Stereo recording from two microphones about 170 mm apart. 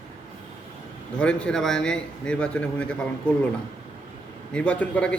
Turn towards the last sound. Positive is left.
turn(degrees=10)  # may be behind; listen again after turning